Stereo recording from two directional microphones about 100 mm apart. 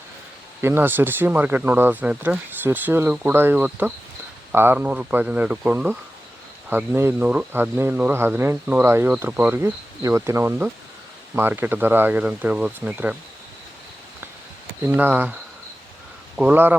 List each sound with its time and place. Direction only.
0.6 s speech: 20° right (ahead or behind)
14.8 s speech: 20° right (ahead or behind)
16.4 s speech: 15° right (ahead or behind)